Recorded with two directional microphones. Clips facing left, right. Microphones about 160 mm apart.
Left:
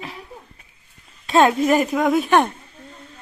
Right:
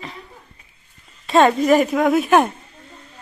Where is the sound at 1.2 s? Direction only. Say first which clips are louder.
Right 1 dB; centre (ahead or behind).